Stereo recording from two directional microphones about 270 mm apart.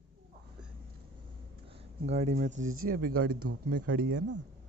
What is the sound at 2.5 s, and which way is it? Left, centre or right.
Speech, right.